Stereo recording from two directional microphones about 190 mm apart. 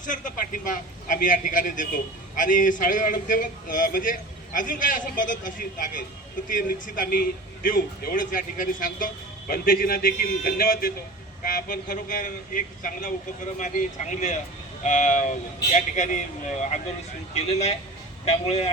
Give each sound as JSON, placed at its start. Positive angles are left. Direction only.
{"t": 0.0, "sound": "a man's voice", "side_deg": 45}